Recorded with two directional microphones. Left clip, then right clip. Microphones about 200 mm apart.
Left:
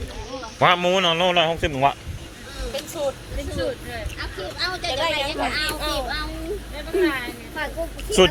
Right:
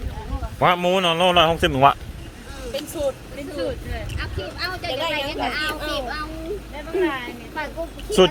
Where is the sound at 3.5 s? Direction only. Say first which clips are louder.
Even; 20° right (ahead or behind).